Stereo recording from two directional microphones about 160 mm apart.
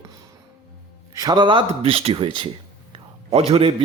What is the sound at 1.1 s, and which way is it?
A man's voice, 25° right (ahead or behind).